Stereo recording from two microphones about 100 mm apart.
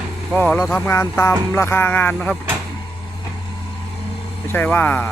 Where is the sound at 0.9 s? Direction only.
30° left (ahead or behind).